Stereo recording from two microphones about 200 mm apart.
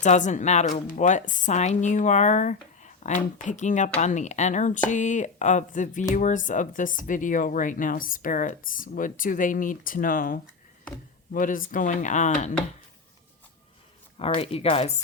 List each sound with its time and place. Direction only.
0.0 s speech: 35° left (ahead or behind)
14.2 s speech: 30° left (ahead or behind)